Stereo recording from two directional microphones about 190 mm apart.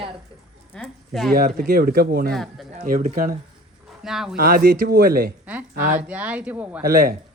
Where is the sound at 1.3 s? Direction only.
50° right (ahead or behind).